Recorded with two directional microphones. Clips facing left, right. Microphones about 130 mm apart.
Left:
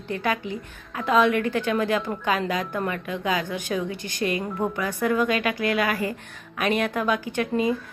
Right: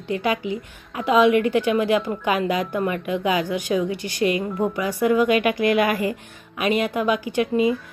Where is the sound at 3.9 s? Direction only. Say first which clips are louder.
Right 5 dB; 50° left (ahead or behind).